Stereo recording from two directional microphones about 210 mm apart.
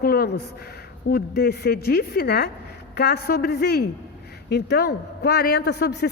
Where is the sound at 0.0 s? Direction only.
45° left (ahead or behind).